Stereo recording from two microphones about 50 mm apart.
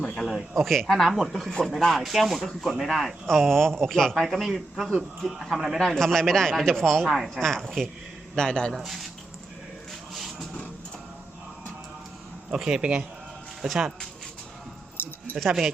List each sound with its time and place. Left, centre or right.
0.0 s a sound: centre
0.3 s speech: centre
4.3 s speech: centre
5.9 s speech: centre
8.7 s speech: centre
12.6 s a man's voice: centre
14.9 s a sound: left